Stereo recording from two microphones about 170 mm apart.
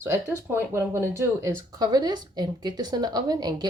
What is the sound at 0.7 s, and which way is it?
Speech, 15° right (ahead or behind).